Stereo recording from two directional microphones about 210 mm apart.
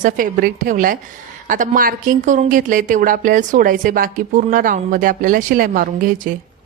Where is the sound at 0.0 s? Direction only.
40° right (ahead or behind).